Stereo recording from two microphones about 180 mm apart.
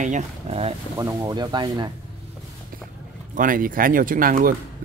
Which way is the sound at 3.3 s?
50° right (ahead or behind).